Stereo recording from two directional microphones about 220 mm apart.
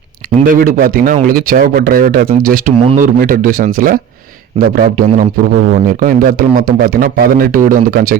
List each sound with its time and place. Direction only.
0.4 s speech: 40° right (ahead or behind)